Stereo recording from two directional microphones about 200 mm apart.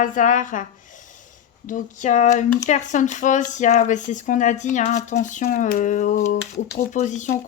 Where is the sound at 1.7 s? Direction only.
35° left (ahead or behind).